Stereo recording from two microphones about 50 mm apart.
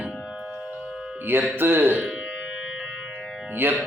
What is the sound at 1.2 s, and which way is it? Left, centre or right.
Speech, right.